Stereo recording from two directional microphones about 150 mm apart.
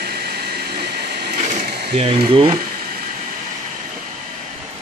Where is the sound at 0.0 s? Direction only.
90° right.